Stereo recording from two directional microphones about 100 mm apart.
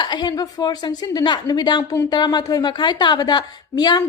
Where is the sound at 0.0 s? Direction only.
50° left (ahead or behind).